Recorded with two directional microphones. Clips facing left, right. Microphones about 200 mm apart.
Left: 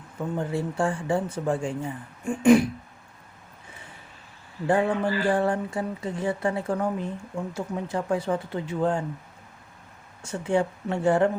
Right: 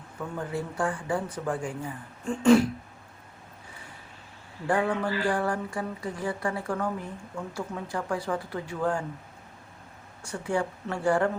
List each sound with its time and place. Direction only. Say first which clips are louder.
0.2 s speech: left 4 dB; 25° left (ahead or behind)
4.6 s speech: left 3 dB; 25° left (ahead or behind)
10.2 s speech: left 4 dB; 25° left (ahead or behind)